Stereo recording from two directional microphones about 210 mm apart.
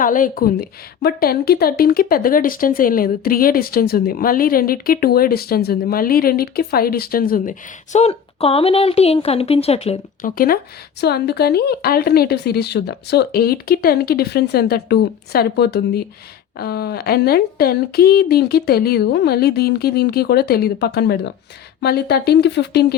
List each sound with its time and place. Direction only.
0.0 s a woman's voice: 40° left (ahead or behind)
7.9 s a woman's voice: 30° left (ahead or behind); by 23.0 s 50° left (ahead or behind)